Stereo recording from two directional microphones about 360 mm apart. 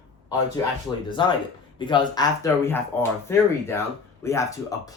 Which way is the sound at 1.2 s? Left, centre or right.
Centre.